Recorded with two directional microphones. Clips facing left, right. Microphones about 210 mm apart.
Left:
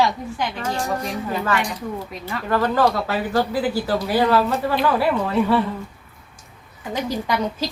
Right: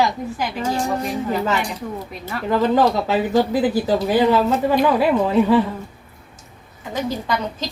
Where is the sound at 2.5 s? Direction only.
20° right (ahead or behind).